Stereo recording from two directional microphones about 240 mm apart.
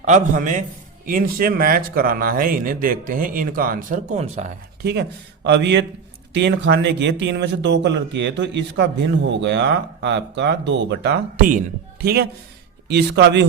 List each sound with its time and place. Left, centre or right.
0.0 s speech: right
4.8 s speech: right